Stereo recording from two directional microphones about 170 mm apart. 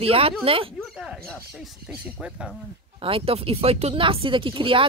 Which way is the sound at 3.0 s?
35° right (ahead or behind).